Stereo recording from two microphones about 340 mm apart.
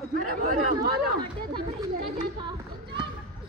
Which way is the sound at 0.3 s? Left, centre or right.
Right.